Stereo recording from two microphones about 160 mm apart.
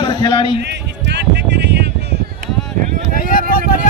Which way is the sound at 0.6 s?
90° right.